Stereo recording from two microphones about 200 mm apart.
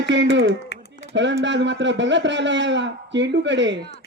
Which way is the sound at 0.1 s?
65° right (ahead or behind).